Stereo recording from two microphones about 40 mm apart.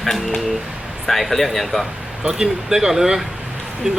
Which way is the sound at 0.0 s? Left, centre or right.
Centre.